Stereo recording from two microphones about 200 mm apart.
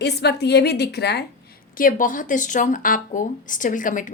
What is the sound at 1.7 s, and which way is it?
Speech, 45° left (ahead or behind).